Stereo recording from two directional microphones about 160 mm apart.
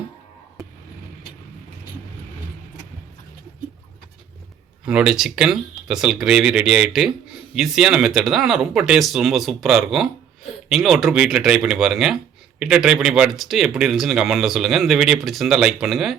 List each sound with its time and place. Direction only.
4.9 s speech: 5° right (ahead or behind)